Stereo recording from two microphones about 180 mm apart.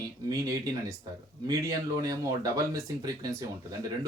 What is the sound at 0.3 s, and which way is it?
Speech, 20° right (ahead or behind).